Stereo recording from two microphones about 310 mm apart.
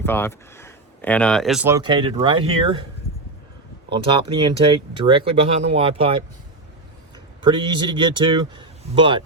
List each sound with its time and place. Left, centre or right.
0.0 s speech: centre
3.8 s speech: centre
7.4 s speech: centre